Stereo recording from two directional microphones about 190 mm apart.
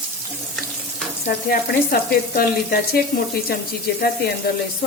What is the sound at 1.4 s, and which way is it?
Speech, 50° left (ahead or behind).